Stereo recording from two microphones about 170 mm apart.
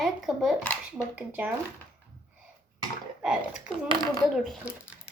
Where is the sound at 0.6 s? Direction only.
10° left (ahead or behind).